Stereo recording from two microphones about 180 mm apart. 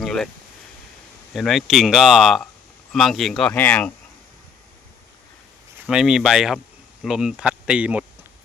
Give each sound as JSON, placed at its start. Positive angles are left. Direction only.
{"t": 0.0, "sound": "a sound", "side_deg": 0}
{"t": 1.3, "sound": "speech", "side_deg": 0}
{"t": 5.8, "sound": "speech", "side_deg": -5}